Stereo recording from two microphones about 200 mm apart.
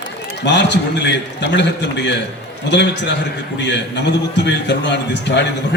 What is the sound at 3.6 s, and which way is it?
A man's voice, 60° left (ahead or behind).